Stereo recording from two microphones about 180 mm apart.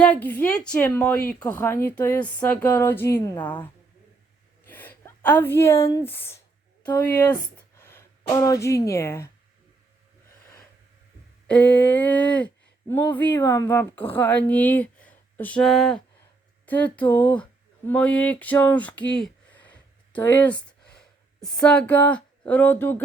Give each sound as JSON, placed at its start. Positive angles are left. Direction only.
{"t": 0.0, "sound": "speech", "side_deg": 10}
{"t": 4.6, "sound": "a woman's voice", "side_deg": 10}
{"t": 11.4, "sound": "speech", "side_deg": 5}
{"t": 19.2, "sound": "a sound", "side_deg": 10}
{"t": 20.1, "sound": "speech", "side_deg": 10}